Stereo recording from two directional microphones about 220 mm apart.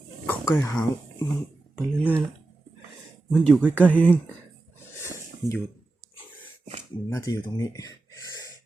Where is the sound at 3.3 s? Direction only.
Centre (ahead or behind).